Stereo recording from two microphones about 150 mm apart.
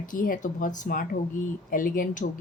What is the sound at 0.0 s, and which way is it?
Speech, 65° left (ahead or behind).